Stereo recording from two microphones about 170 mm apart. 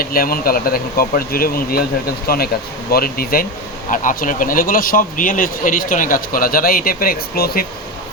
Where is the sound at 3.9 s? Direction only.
50° left (ahead or behind).